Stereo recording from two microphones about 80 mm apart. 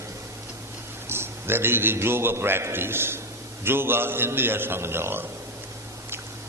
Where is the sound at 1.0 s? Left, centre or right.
Right.